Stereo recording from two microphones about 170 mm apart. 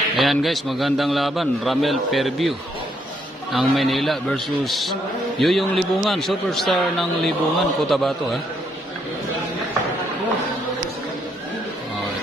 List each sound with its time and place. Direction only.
0.1 s a man's voice: centre (ahead or behind)
3.5 s a man's voice: centre (ahead or behind)